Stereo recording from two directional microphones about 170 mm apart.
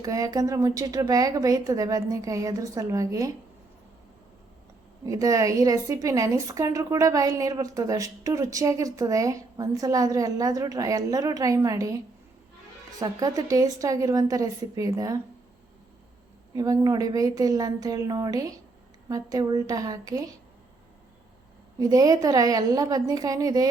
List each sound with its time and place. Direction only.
0.0 s a woman's voice: 20° right (ahead or behind)
5.0 s a woman's voice: 20° right (ahead or behind)
13.0 s a woman's voice: 20° right (ahead or behind)
16.6 s a woman's voice: 20° right (ahead or behind)
21.8 s a woman's voice: 20° right (ahead or behind)